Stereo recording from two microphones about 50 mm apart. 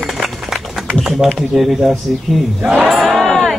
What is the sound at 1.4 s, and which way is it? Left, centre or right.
Speech, centre.